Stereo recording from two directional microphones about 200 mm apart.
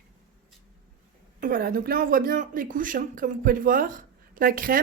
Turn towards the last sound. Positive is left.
turn(degrees=-45)  # may be behind; listen again after turning